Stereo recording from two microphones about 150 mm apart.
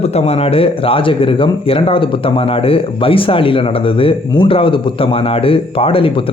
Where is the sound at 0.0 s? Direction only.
45° left (ahead or behind).